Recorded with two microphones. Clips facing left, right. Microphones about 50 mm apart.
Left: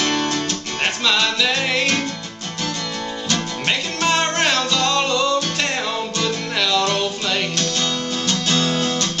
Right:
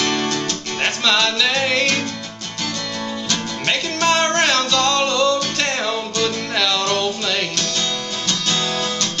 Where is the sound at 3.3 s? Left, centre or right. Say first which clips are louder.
Left 1 dB; centre.